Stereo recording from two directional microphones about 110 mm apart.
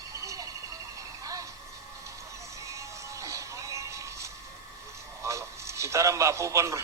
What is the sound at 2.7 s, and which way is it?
Music, 30° right (ahead or behind).